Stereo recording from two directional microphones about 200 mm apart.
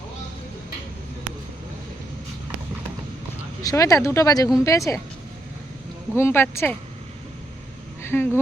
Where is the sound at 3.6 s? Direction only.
15° left (ahead or behind).